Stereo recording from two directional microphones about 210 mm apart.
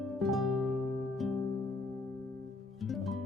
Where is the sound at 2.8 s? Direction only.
Centre (ahead or behind).